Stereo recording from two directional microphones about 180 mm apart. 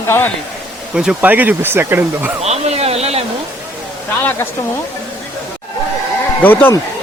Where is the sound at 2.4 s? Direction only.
35° right (ahead or behind).